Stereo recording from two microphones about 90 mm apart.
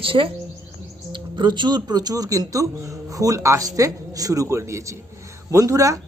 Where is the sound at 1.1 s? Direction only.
60° right (ahead or behind).